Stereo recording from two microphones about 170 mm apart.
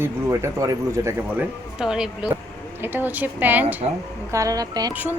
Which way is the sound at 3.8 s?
40° right (ahead or behind).